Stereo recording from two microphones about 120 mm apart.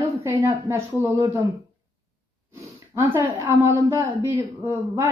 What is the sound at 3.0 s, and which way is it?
A woman's voice, 20° right (ahead or behind).